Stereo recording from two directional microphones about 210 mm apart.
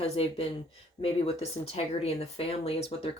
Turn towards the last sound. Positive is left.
turn(degrees=30)  # may be behind; listen again after turning